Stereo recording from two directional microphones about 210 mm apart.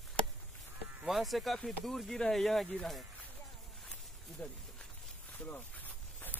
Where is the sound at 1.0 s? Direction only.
Centre (ahead or behind).